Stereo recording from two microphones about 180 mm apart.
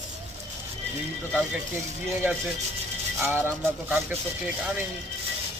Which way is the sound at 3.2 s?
10° right (ahead or behind).